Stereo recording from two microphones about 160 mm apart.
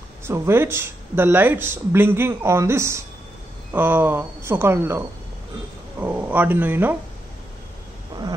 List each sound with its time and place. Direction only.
0.2 s speech: 15° right (ahead or behind)
8.1 s wild animals: 30° right (ahead or behind)